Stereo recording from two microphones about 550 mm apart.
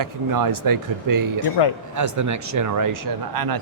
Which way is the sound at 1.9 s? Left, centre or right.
Right.